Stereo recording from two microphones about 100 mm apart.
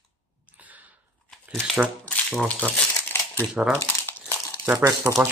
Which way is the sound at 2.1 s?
10° left (ahead or behind).